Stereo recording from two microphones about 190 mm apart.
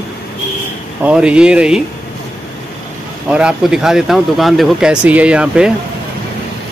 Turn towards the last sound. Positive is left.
turn(degrees=-5)  # may be behind; listen again after turning